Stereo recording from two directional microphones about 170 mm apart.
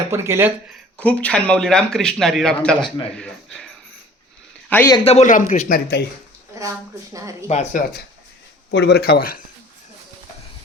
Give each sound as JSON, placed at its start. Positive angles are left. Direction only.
{"t": 0.1, "sound": "speech", "side_deg": -15}
{"t": 0.9, "sound": "a man's voice", "side_deg": 10}
{"t": 4.7, "sound": "a man's voice", "side_deg": 10}
{"t": 5.0, "sound": "speech", "side_deg": 40}
{"t": 6.5, "sound": "a woman's voice", "side_deg": -20}
{"t": 7.4, "sound": "speech", "side_deg": 40}
{"t": 8.7, "sound": "speech", "side_deg": 75}